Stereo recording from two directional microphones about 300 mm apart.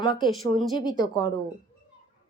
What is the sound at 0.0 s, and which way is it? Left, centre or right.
Speech, centre.